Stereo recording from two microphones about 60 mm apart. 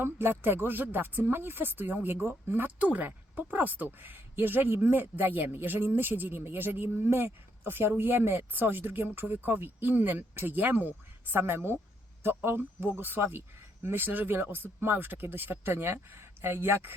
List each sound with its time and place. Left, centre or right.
0.0 s speech: right